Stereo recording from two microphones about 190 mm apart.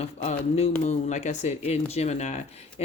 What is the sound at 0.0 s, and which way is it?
Speech, 35° left (ahead or behind).